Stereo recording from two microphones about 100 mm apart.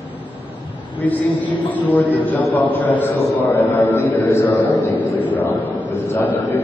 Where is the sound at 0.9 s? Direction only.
15° left (ahead or behind).